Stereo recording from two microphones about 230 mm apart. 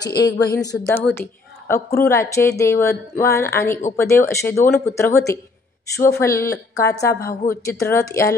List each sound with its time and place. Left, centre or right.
0.2 s a woman's voice: centre
7.2 s a woman's voice: left
7.8 s a woman's voice: centre